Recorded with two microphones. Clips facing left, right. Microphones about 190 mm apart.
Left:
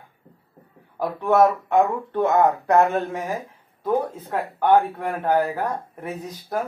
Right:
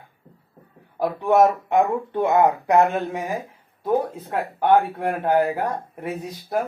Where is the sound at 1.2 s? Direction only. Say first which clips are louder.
Even; 15° right (ahead or behind).